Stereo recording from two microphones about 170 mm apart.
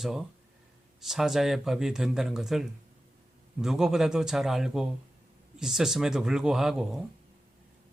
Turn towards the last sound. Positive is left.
turn(degrees=0)  # may be behind; listen again after turning